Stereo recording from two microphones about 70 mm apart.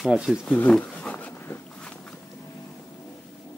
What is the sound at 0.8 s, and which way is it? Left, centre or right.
Speech, centre.